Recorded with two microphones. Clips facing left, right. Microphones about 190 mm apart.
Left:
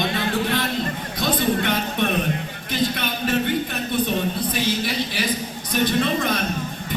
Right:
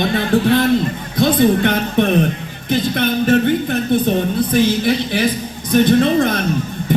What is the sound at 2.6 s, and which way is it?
Music, 50° right (ahead or behind).